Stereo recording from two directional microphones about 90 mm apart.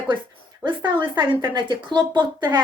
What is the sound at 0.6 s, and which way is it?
Speech, 60° right (ahead or behind).